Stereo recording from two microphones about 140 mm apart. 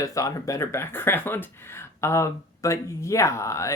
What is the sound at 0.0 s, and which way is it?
Speech, 25° left (ahead or behind).